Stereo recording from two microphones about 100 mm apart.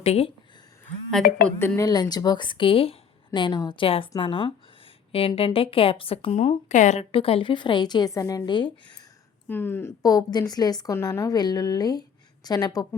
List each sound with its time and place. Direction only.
0.0 s a woman's voice: 90° left
1.5 s a woman's voice: 25° left (ahead or behind)
1.8 s speech: 45° left (ahead or behind); by 2.9 s 65° left (ahead or behind)
3.3 s speech: 45° left (ahead or behind)
3.8 s a woman's voice: 65° left (ahead or behind)
5.1 s a woman's voice: 65° left (ahead or behind); by 8.4 s 30° left (ahead or behind)
8.4 s speech: 50° left (ahead or behind)
9.5 s a woman's voice: 20° left (ahead or behind)
10.0 s a woman's voice: 40° left (ahead or behind)